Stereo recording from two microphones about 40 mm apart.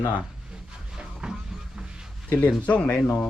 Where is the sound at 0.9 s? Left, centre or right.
Right.